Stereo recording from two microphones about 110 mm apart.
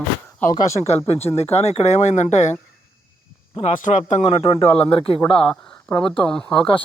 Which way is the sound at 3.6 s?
90° left.